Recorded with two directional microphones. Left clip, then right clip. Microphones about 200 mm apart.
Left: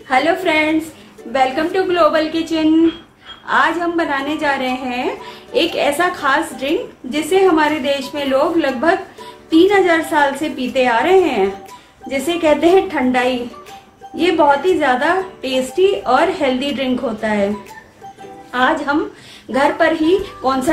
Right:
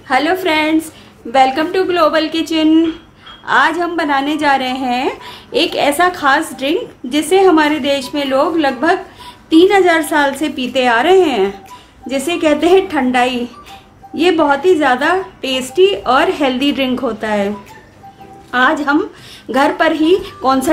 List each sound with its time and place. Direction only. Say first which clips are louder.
0.1 s a woman's voice: right 1 dB; 30° right (ahead or behind); by 17.5 s 50° right (ahead or behind)
18.5 s a woman's voice: right 3 dB; 45° right (ahead or behind)